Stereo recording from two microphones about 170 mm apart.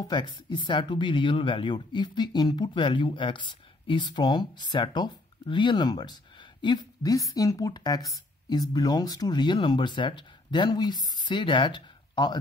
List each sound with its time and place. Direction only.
0.0 s speech: 25° left (ahead or behind)